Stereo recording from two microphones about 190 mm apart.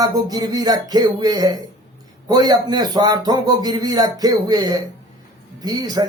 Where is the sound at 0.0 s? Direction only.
20° right (ahead or behind).